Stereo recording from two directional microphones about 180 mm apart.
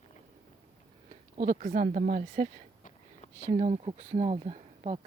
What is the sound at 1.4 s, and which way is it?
Speech, 45° right (ahead or behind).